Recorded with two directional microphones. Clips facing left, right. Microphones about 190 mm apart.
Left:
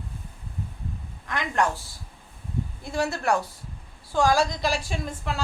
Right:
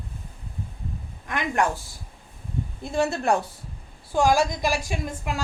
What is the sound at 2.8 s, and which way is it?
A woman's voice, 20° right (ahead or behind).